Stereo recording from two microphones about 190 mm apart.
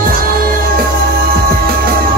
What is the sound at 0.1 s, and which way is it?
Music, 50° right (ahead or behind).